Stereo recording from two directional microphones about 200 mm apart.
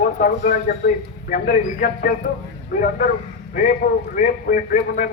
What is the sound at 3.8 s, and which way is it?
A man's voice, 40° left (ahead or behind).